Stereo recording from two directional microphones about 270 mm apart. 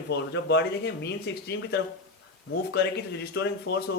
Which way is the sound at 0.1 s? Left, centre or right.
Left.